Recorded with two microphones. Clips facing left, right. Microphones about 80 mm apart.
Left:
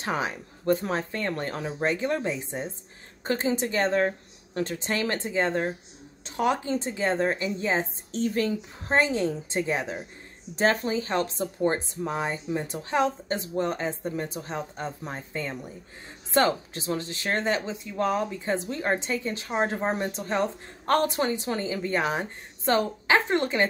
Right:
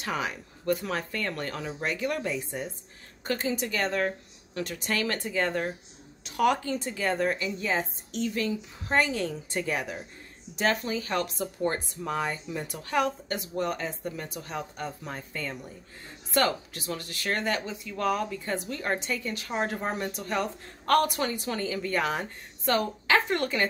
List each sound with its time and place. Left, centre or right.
0.0 s speech: left